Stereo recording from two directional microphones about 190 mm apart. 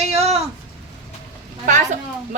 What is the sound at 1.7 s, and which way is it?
Speech, 40° right (ahead or behind).